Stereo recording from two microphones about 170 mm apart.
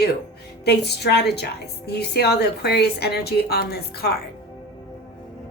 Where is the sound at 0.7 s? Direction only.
75° left (ahead or behind).